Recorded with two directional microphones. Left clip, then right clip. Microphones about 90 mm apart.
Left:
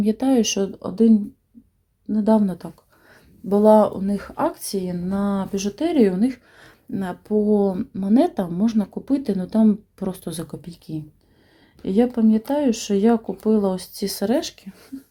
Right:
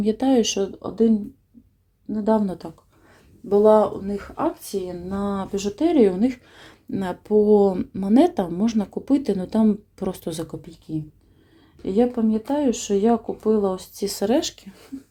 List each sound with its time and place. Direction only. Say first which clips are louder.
0.0 s speech: even; 5° right (ahead or behind)
0.6 s speech: left 1 dB; 25° left (ahead or behind)
2.4 s speech: left 2 dB; 5° right (ahead or behind)
3.5 s a woman's voice: left 1 dB; 40° left (ahead or behind)
5.0 s speech: left 2 dB; 10° left (ahead or behind)
5.4 s speech: right 1 dB; centre (ahead or behind)
6.1 s speech: even; 20° right (ahead or behind)
10.6 s speech: right 2 dB; 15° left (ahead or behind); by 14.9 s 5° right (ahead or behind)